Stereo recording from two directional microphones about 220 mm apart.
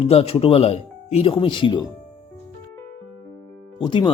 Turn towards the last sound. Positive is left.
turn(degrees=20)  # may be behind; listen again after turning